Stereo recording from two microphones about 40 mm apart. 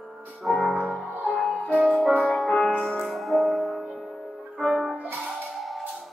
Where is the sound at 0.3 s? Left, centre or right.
Centre.